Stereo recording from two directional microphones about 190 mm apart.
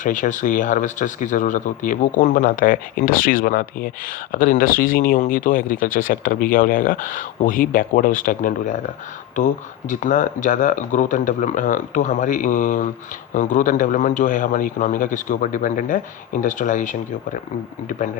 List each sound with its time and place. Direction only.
0.0 s speech: 40° left (ahead or behind)